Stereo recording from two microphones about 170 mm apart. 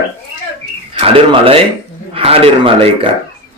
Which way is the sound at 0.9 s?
30° right (ahead or behind).